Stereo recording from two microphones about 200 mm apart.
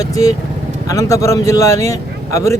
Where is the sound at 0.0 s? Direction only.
15° left (ahead or behind).